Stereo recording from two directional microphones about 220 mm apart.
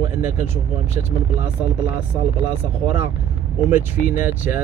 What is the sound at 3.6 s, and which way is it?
Speech, 10° right (ahead or behind).